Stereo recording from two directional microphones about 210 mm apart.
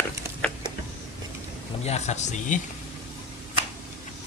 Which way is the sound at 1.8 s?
30° left (ahead or behind).